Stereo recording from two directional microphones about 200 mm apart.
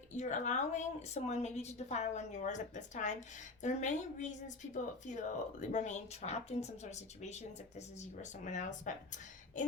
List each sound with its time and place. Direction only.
0.1 s a woman's voice: 35° left (ahead or behind)